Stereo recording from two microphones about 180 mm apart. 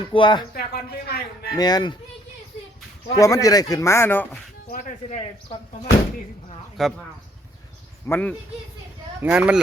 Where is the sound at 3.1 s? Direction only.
20° left (ahead or behind).